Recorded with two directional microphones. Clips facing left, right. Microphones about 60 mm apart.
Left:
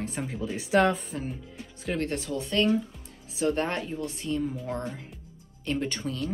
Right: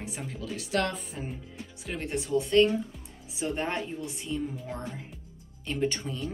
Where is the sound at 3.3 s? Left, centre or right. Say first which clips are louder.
Left 4 dB; centre.